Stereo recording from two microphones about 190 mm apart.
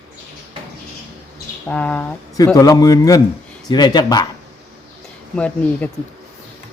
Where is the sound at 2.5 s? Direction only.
20° left (ahead or behind).